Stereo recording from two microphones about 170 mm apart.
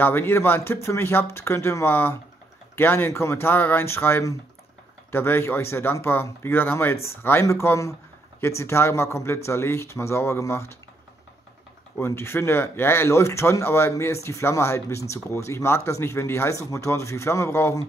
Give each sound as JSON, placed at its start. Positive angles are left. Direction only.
{"t": 0.0, "sound": "speech", "side_deg": 15}
{"t": 12.0, "sound": "speech", "side_deg": 15}